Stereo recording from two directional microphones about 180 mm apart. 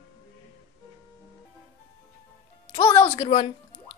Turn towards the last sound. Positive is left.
turn(degrees=30)  # may be behind; listen again after turning